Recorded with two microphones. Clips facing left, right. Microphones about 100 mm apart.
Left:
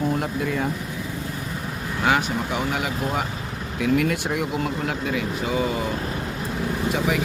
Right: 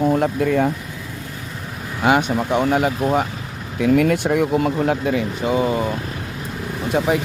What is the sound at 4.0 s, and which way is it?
Speech, 50° right (ahead or behind).